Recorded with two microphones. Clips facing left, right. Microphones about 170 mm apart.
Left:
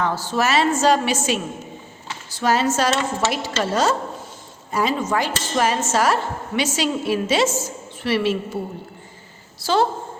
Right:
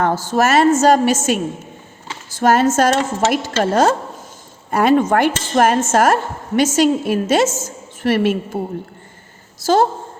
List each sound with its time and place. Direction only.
0.0 s a woman's voice: 45° right (ahead or behind)
9.6 s a woman's voice: 45° right (ahead or behind)